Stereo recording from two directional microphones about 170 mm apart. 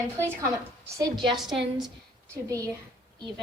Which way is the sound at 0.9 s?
25° right (ahead or behind).